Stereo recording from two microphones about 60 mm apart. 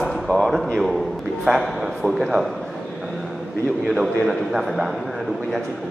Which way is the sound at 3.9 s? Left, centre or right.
Centre.